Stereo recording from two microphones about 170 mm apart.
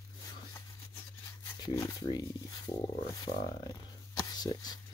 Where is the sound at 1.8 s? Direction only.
20° left (ahead or behind).